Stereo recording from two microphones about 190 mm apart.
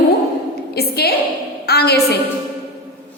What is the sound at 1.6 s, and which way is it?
Speech, 60° left (ahead or behind).